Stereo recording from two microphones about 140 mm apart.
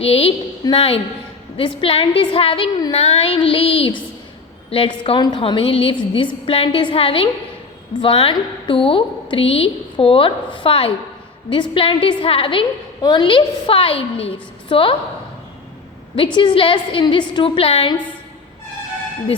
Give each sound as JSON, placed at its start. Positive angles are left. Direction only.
{"t": 0.0, "sound": "a woman's voice", "side_deg": 45}
{"t": 16.1, "sound": "a woman's voice", "side_deg": 40}